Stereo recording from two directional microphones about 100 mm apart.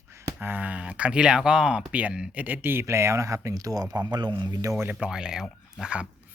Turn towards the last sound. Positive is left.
turn(degrees=-10)  # may be behind; listen again after turning